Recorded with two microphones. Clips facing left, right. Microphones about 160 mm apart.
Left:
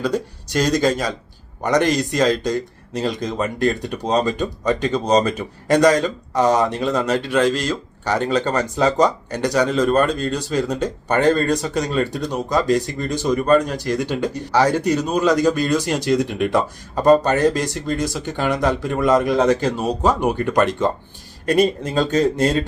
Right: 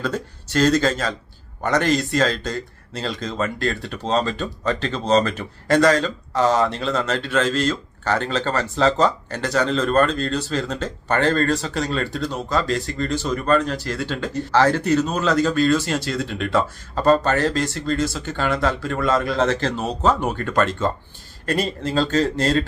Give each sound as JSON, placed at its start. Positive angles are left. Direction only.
{"t": 0.0, "sound": "speech", "side_deg": 15}